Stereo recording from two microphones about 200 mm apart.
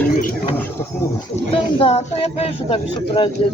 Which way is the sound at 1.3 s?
30° left (ahead or behind).